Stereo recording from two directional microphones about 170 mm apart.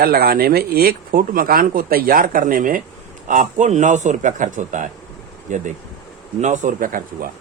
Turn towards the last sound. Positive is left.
turn(degrees=-55)  # may be behind; listen again after turning